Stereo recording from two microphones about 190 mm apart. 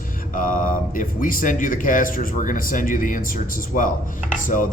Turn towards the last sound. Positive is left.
turn(degrees=45)  # may be behind; listen again after turning